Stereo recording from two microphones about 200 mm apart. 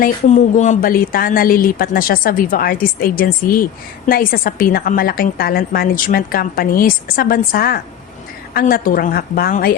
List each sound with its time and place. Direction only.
0.0 s a woman's voice: 40° left (ahead or behind)